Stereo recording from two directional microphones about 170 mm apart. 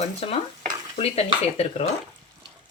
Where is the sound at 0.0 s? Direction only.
35° left (ahead or behind).